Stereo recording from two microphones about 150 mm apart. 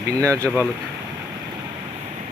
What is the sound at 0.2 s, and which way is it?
Speech, 20° right (ahead or behind).